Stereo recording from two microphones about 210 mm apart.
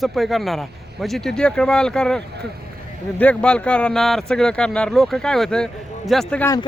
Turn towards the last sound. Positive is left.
turn(degrees=5)  # may be behind; listen again after turning